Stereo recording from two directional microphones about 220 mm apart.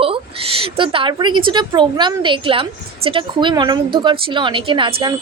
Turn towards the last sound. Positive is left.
turn(degrees=-20)  # may be behind; listen again after turning